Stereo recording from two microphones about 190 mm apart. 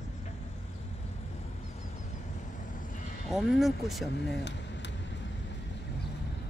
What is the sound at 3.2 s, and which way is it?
Speech, centre (ahead or behind).